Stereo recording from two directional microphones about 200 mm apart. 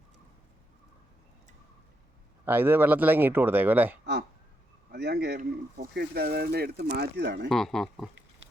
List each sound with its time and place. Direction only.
2.4 s speech: 10° right (ahead or behind)
4.9 s speech: 55° right (ahead or behind)
5.4 s speech: 45° right (ahead or behind)
7.4 s speech: centre (ahead or behind)